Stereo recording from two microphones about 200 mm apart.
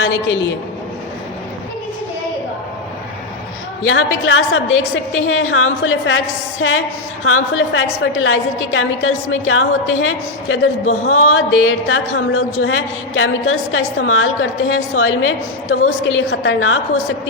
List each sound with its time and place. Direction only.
3.8 s a woman's voice: 90° left